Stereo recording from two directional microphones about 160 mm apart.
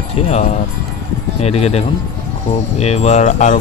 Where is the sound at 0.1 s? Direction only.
40° left (ahead or behind).